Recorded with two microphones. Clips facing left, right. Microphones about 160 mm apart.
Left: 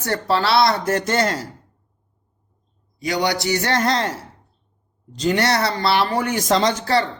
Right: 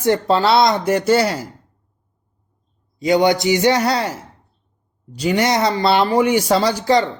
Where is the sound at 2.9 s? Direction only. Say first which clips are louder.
Right 7 dB; 20° right (ahead or behind).